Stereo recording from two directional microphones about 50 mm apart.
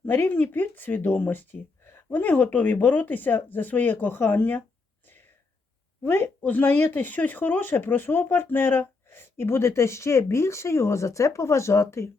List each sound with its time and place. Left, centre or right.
0.0 s speech: left
6.1 s a woman's voice: left
6.7 s speech: left